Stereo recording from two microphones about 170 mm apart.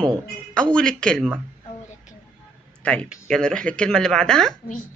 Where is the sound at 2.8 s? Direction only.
5° left (ahead or behind).